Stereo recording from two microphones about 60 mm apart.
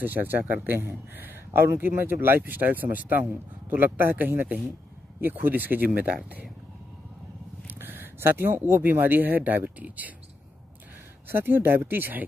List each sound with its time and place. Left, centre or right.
0.0 s speech: right
7.6 s speech: right
11.2 s speech: right